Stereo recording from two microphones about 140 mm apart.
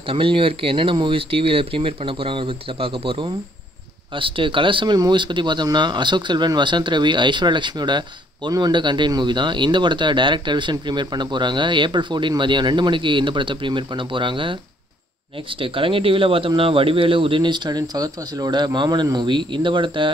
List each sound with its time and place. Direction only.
0.1 s speech: 40° right (ahead or behind)
15.6 s speech: 40° right (ahead or behind)